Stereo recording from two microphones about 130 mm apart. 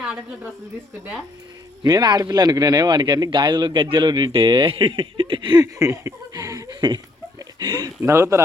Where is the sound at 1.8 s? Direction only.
30° right (ahead or behind).